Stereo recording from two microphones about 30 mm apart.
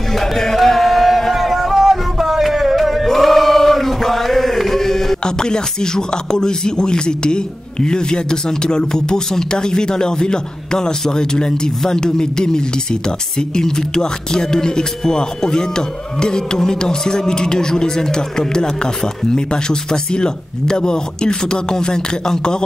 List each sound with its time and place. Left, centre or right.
0.2 s a sound: centre
3.1 s chant: centre
5.2 s speech: left